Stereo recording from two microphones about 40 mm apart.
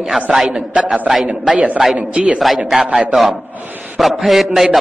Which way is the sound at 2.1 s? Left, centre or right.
Right.